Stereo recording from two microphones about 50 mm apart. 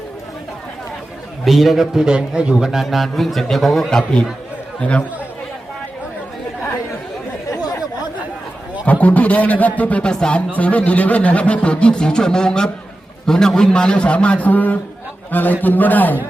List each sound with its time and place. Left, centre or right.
1.5 s a man's voice: centre
2.0 s a man's voice: centre
2.8 s a man's voice: centre
4.8 s speech: left
8.9 s a man's voice: left